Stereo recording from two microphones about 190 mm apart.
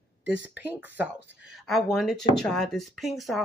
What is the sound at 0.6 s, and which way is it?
Speech, 10° right (ahead or behind).